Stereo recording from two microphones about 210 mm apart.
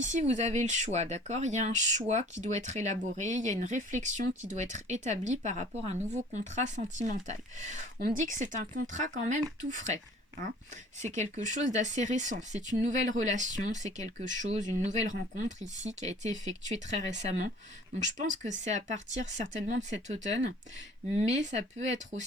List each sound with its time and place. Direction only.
0.0 s speech: 35° right (ahead or behind)
11.0 s speech: 35° right (ahead or behind)
18.4 s speech: 35° right (ahead or behind)